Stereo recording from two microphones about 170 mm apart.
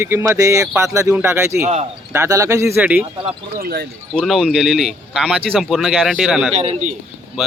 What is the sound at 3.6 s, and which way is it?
Speech, 65° right (ahead or behind).